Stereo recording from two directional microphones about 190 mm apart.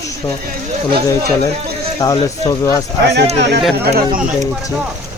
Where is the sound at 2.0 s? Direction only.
20° left (ahead or behind).